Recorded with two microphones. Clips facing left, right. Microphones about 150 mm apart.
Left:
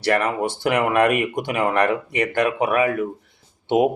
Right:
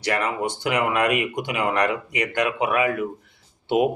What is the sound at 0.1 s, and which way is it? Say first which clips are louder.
Speech: left 4 dB; 55° left (ahead or behind).